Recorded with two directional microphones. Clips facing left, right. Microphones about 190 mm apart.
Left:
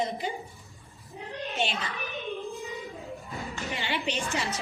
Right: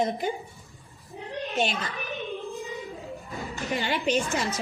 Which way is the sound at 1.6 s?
45° right (ahead or behind).